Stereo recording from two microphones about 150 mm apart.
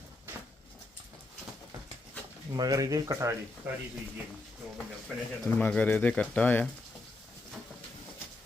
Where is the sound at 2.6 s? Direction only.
25° right (ahead or behind).